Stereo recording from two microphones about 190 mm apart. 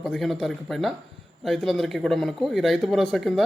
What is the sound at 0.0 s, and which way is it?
Speech, centre (ahead or behind).